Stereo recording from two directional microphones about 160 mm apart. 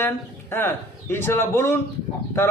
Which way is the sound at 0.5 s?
15° left (ahead or behind).